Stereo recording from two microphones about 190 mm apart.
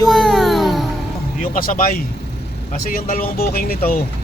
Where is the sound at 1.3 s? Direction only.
45° left (ahead or behind).